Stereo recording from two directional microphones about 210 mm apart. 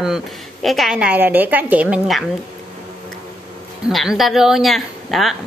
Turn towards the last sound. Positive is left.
turn(degrees=0)  # may be behind; listen again after turning